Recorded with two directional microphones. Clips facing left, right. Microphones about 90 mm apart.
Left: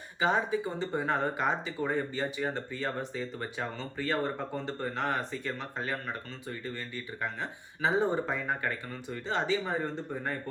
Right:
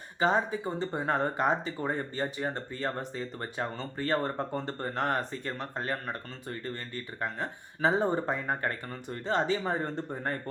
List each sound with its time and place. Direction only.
0.2 s speech: 35° right (ahead or behind)